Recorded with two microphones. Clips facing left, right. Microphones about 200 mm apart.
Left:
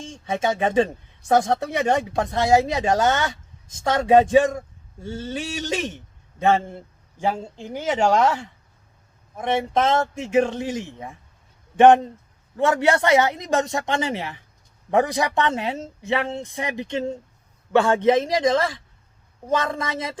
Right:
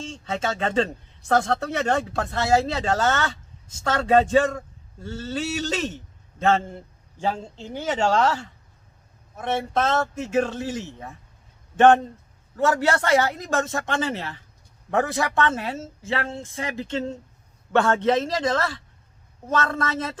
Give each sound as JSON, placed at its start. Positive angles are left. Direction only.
{"t": 0.0, "sound": "a woman's voice", "side_deg": 15}